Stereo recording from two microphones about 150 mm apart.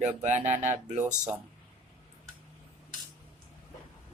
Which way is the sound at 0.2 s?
50° right (ahead or behind).